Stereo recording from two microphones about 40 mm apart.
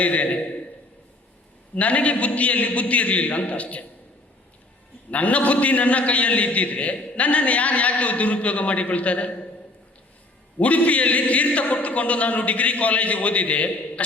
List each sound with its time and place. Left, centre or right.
0.0 s a man's voice: left
1.7 s a man's voice: left
5.1 s a man's voice: left
10.6 s a man's voice: left